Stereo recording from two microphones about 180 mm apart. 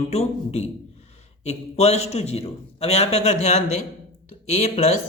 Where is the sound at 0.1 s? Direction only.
35° left (ahead or behind).